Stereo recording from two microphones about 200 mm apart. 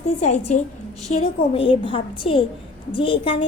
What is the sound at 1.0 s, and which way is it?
A woman's voice, 30° left (ahead or behind).